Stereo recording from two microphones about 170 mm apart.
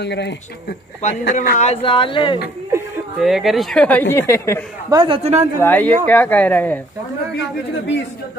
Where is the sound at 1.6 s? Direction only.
35° left (ahead or behind).